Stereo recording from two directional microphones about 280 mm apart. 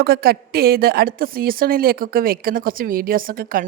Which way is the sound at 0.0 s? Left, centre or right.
Right.